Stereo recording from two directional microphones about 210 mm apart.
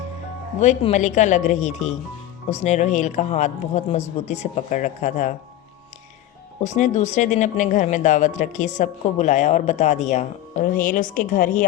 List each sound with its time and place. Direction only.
0.6 s speech: 30° left (ahead or behind)
6.6 s speech: 35° left (ahead or behind)